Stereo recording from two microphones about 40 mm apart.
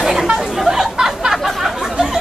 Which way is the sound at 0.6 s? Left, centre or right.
Centre.